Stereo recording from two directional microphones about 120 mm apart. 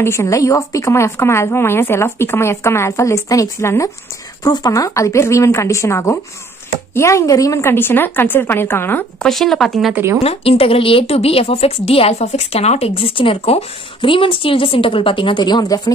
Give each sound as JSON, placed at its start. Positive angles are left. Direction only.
{"t": 0.0, "sound": "speech", "side_deg": 20}
{"t": 9.2, "sound": "speech", "side_deg": 0}
{"t": 10.2, "sound": "speech", "side_deg": 55}